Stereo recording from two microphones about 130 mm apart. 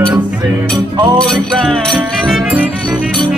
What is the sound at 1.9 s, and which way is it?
Music, 10° right (ahead or behind).